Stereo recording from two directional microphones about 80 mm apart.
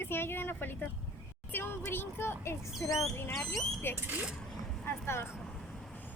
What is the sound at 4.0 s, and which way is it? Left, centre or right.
Speech, right.